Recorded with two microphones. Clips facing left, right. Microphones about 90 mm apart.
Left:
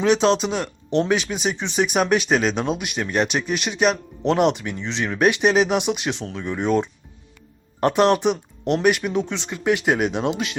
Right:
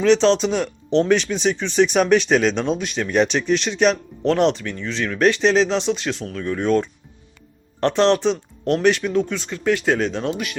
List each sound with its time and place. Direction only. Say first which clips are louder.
0.0 s speech: right 2 dB; 10° left (ahead or behind)